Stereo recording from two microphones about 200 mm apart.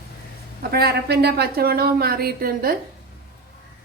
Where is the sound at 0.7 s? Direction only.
50° right (ahead or behind).